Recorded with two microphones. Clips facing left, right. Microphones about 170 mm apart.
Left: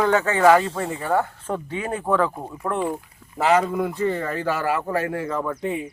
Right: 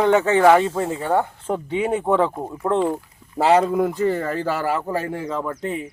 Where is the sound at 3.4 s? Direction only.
35° right (ahead or behind).